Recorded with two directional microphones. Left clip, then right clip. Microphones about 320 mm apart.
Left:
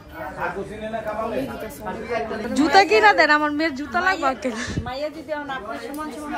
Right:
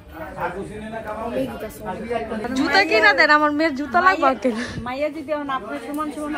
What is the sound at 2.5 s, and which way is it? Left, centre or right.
A woman's voice, centre.